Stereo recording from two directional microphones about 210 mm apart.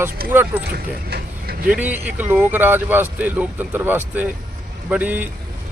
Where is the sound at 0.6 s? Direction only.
50° right (ahead or behind).